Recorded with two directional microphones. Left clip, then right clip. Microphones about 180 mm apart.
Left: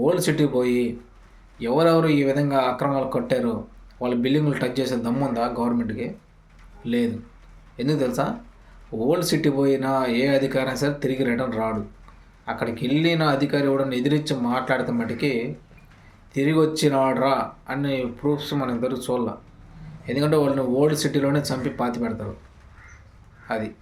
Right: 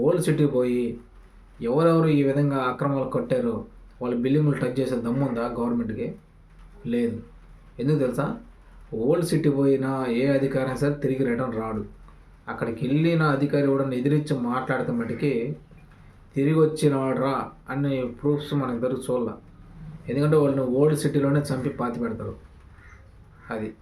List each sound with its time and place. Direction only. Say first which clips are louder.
0.0 s speech: left 1 dB; 10° right (ahead or behind)
23.5 s speech: left 5 dB; 15° right (ahead or behind)